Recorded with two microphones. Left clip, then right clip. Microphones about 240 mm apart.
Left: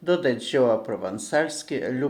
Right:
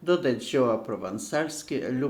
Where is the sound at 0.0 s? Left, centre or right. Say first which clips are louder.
Left 2 dB; centre.